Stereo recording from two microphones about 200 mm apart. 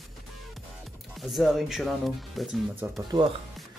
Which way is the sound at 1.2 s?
Centre (ahead or behind).